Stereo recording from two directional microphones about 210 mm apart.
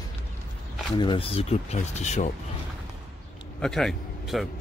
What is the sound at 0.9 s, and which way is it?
Speech, 25° left (ahead or behind).